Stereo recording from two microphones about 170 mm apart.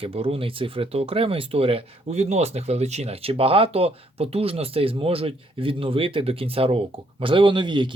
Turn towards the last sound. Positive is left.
turn(degrees=-25)  # may be behind; listen again after turning